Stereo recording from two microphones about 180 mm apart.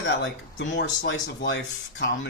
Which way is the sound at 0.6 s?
90° left.